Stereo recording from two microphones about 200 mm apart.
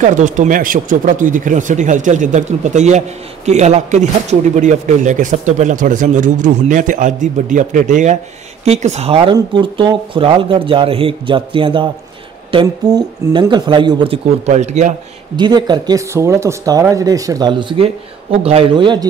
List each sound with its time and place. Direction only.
0.0 s a man's voice: 40° right (ahead or behind)
15.3 s speech: 20° right (ahead or behind)